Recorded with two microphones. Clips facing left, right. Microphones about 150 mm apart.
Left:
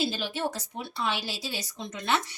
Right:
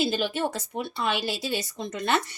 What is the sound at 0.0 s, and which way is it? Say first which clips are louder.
Speech: right 4 dB; 55° right (ahead or behind).